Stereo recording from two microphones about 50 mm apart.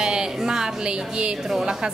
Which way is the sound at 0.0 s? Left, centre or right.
Centre.